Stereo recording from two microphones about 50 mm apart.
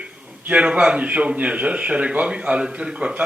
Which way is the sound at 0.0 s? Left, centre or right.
Right.